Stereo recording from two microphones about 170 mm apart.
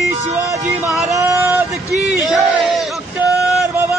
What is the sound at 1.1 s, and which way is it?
Speech, 20° right (ahead or behind).